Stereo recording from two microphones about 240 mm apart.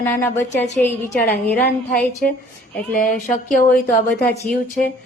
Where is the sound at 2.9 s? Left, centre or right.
Left.